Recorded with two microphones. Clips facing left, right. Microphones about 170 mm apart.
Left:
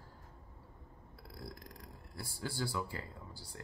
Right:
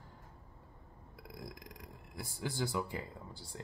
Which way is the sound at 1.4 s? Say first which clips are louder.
Even; 15° right (ahead or behind).